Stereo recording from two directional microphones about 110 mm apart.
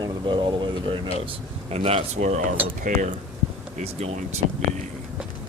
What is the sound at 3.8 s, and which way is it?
Speech, 85° right.